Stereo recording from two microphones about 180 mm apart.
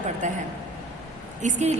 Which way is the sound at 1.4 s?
40° right (ahead or behind).